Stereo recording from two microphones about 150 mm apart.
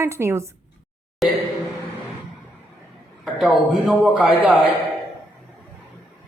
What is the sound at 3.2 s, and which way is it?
A man's voice, centre (ahead or behind).